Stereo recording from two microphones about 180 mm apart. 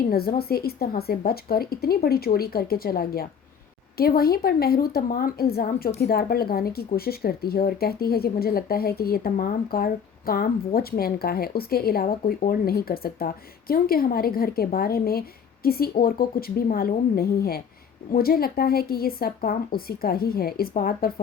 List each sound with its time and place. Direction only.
0.1 s speech: 55° left (ahead or behind)
12.0 s speech: 45° left (ahead or behind)